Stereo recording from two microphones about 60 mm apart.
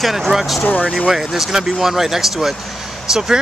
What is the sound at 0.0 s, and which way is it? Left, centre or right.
Speech, centre.